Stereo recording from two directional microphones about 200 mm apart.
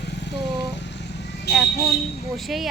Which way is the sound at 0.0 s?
60° left (ahead or behind).